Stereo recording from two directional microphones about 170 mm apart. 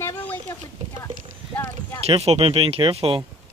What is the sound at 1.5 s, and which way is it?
Clip-clop, 15° left (ahead or behind).